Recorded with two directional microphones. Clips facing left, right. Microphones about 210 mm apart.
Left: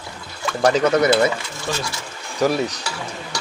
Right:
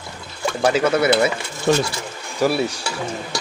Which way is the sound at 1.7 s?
60° right (ahead or behind).